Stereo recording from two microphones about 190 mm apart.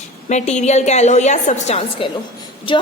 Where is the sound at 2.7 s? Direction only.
25° left (ahead or behind).